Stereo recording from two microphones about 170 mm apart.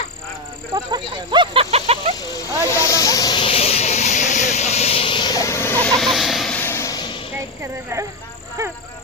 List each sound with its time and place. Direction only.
0.7 s speech: 25° right (ahead or behind)
2.2 s speech: 20° left (ahead or behind)
2.6 s hiss: 20° left (ahead or behind)
6.0 s a sound: centre (ahead or behind); by 7.2 s 25° left (ahead or behind)
7.6 s speech: 15° right (ahead or behind)